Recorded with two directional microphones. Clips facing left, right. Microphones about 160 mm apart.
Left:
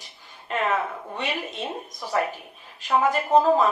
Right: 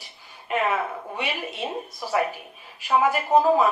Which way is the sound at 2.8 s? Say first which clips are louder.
Even; 10° right (ahead or behind).